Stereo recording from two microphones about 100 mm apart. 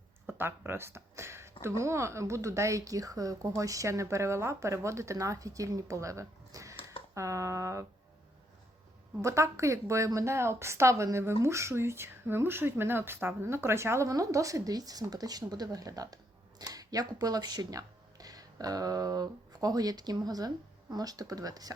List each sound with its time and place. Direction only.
0.3 s a woman's voice: 20° right (ahead or behind)
9.2 s a woman's voice: 30° right (ahead or behind)